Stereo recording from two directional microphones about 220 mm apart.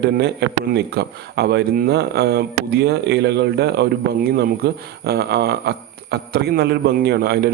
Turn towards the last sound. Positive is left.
turn(degrees=-50)  # may be behind; listen again after turning